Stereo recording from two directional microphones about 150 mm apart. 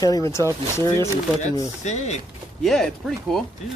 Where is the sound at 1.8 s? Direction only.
50° left (ahead or behind).